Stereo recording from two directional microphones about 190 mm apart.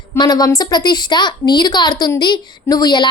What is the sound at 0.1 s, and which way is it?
A woman's voice, 20° left (ahead or behind).